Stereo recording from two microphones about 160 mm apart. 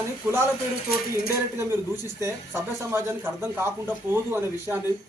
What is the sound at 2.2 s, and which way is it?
Speech, 15° right (ahead or behind).